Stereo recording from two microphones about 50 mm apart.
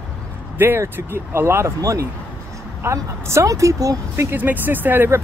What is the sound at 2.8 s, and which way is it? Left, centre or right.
Speech, right.